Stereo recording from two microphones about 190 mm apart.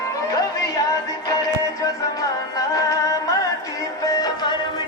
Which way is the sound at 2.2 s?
15° left (ahead or behind).